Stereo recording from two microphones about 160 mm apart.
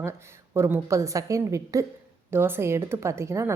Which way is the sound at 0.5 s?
15° right (ahead or behind).